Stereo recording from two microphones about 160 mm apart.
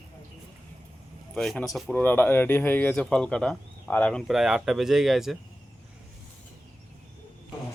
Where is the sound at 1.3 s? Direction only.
5° left (ahead or behind).